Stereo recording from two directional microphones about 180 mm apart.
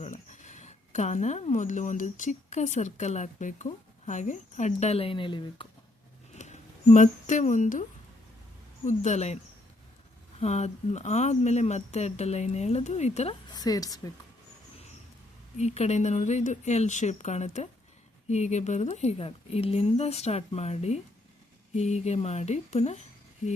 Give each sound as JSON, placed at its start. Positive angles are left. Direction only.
{"t": 0.0, "sound": "speech", "side_deg": 40}
{"t": 6.3, "sound": "speech", "side_deg": 40}
{"t": 10.4, "sound": "speech", "side_deg": 40}
{"t": 13.5, "sound": "a woman's voice", "side_deg": 20}
{"t": 15.5, "sound": "speech", "side_deg": 40}